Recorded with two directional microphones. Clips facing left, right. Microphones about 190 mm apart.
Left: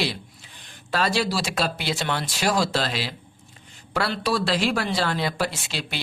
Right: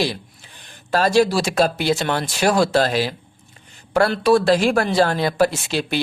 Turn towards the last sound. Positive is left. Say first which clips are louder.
# right 9 dB
turn(degrees=-50)  # may be behind; listen again after turning